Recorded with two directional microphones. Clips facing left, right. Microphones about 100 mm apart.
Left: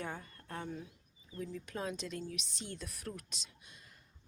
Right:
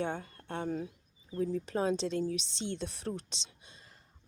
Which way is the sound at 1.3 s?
30° right (ahead or behind).